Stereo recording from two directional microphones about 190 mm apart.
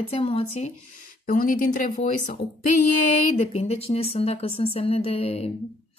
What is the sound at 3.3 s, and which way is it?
A woman's voice, 35° left (ahead or behind).